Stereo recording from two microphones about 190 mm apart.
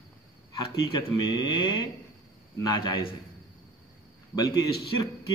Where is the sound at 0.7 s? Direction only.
25° left (ahead or behind).